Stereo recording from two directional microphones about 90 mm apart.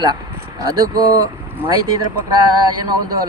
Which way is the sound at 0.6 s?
45° right (ahead or behind).